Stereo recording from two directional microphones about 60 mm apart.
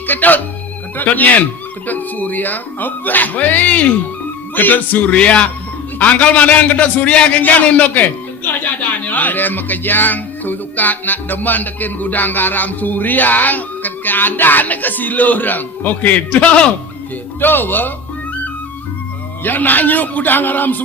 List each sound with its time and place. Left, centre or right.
0.1 s a man's voice: left
5.1 s a man's voice: centre
17.4 s speech: left
19.5 s speech: left